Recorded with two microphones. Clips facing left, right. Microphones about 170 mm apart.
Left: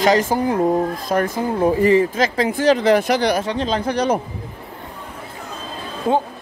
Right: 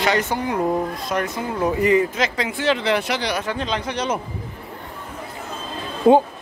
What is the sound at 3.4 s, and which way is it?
Speech, 30° left (ahead or behind).